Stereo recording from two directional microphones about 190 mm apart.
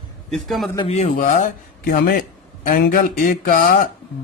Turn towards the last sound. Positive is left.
turn(degrees=45)  # may be behind; listen again after turning